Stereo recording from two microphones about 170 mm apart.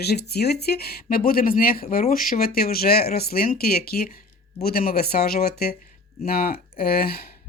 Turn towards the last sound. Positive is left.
turn(degrees=65)  # may be behind; listen again after turning